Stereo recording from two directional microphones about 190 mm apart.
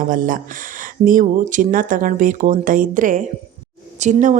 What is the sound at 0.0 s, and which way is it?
A woman's voice, 45° right (ahead or behind).